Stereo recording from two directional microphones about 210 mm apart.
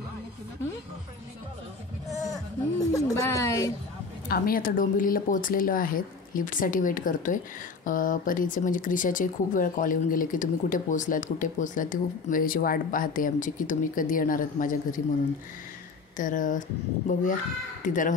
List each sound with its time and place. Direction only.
2.0 s a sound: centre (ahead or behind)
2.8 s a woman's voice: 15° left (ahead or behind)
4.3 s speech: 45° left (ahead or behind)
16.2 s speech: 40° left (ahead or behind)